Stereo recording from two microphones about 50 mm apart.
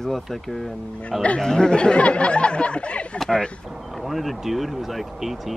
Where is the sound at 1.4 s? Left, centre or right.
Centre.